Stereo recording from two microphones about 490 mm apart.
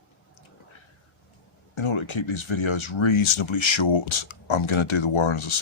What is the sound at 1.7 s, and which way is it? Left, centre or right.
Speech, left.